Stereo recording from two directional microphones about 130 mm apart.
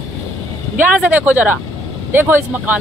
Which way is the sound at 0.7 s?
10° right (ahead or behind).